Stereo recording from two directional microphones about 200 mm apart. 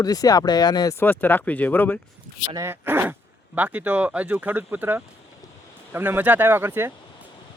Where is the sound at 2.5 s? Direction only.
10° right (ahead or behind).